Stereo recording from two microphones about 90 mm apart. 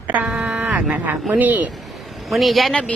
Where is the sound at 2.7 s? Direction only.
15° left (ahead or behind).